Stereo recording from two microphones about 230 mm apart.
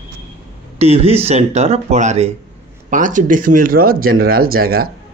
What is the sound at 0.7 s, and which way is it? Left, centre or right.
Speech, right.